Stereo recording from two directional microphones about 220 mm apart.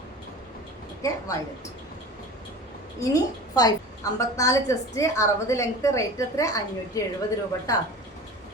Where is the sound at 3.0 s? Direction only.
15° left (ahead or behind).